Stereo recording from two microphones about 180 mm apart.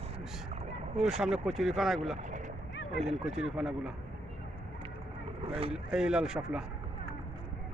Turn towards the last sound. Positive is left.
turn(degrees=-5)  # may be behind; listen again after turning